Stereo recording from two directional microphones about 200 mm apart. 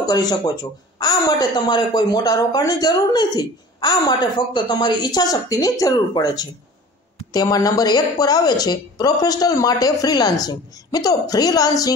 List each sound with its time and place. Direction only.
0.0 s speech: 20° left (ahead or behind)